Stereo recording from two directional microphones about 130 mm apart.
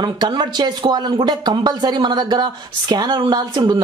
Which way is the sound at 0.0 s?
35° right (ahead or behind).